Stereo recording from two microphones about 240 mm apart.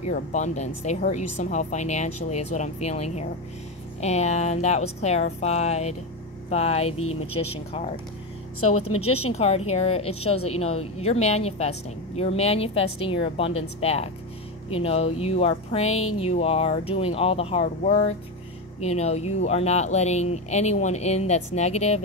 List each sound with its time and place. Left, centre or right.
0.0 s speech: left
7.0 s speech: left
7.3 s speech: left
8.5 s speech: left
9.2 s speech: left